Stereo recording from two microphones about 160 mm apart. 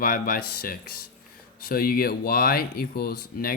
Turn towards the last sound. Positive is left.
turn(degrees=75)  # may be behind; listen again after turning